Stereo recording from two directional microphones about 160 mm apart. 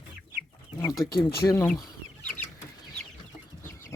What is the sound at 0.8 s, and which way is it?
Speech, 20° left (ahead or behind).